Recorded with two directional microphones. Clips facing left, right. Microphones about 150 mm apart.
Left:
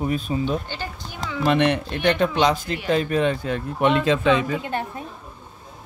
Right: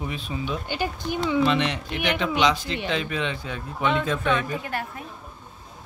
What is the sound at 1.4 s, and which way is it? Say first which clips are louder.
Speech: left 8 dB; 55° left (ahead or behind).